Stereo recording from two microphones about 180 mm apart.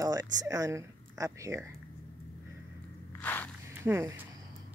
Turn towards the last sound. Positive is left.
turn(degrees=-10)  # may be behind; listen again after turning